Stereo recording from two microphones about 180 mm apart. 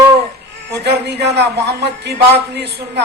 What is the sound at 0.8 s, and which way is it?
A man's voice, 70° right (ahead or behind).